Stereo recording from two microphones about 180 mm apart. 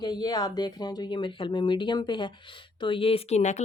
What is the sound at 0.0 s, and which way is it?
Speech, 25° left (ahead or behind).